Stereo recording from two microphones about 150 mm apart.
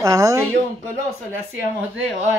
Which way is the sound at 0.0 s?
20° right (ahead or behind).